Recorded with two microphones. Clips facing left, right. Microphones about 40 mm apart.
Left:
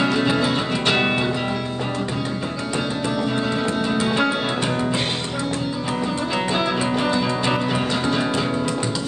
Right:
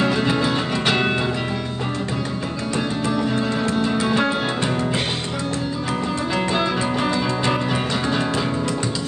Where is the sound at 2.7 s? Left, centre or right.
Centre.